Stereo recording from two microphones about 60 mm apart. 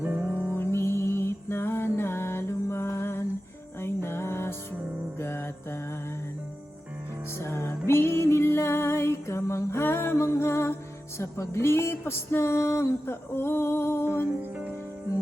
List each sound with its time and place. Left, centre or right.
0.0 s music: right
0.5 s mantra: left
3.8 s music: left
5.2 s mantra: left
7.3 s music: left
14.5 s music: right